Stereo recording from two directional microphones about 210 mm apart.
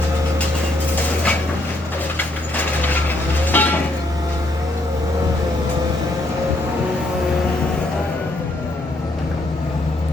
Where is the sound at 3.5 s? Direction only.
10° left (ahead or behind).